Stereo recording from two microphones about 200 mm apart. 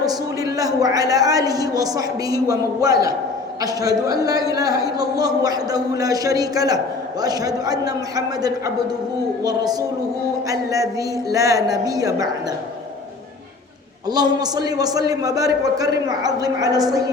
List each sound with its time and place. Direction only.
0.0 s a man's voice: 20° right (ahead or behind)
14.1 s a woman's voice: 20° right (ahead or behind)